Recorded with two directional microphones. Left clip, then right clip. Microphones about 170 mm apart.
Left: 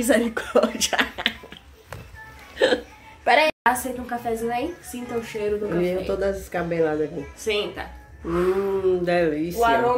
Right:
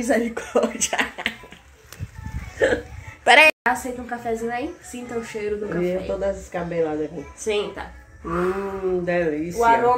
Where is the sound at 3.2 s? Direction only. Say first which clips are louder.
Right 5 dB; 35° right (ahead or behind).